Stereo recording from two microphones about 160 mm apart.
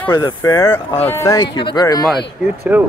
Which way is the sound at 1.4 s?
30° left (ahead or behind).